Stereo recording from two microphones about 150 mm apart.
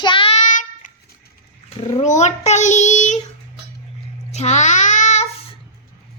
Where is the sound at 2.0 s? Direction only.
50° left (ahead or behind).